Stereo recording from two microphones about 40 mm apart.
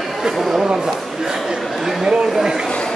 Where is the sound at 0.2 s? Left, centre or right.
Centre.